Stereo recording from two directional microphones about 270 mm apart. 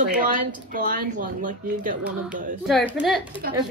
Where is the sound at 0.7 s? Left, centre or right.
Right.